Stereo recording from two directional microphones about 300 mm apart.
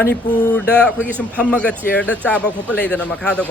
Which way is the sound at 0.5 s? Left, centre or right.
Centre.